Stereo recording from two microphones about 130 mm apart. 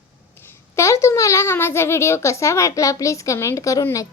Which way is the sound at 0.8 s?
20° left (ahead or behind).